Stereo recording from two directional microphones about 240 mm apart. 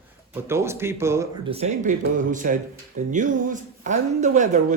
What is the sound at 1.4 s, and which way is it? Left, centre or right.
A man's voice, right.